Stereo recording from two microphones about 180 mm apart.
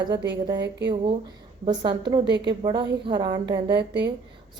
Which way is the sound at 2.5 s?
25° right (ahead or behind).